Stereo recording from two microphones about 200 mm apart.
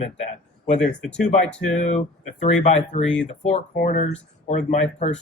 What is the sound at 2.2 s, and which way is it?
Speech, 35° left (ahead or behind).